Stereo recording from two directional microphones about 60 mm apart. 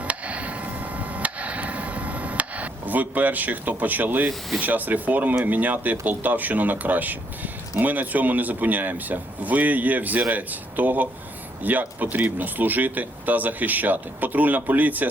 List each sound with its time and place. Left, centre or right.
0.0 s a sound: right
4.3 s speech: centre
4.6 s speech: right